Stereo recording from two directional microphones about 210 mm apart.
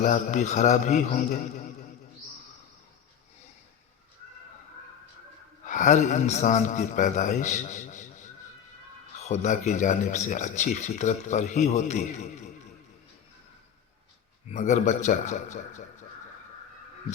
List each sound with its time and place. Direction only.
0.0 s speech: 35° left (ahead or behind)
5.6 s speech: 35° left (ahead or behind)
9.2 s speech: 35° left (ahead or behind)
14.5 s speech: 35° left (ahead or behind)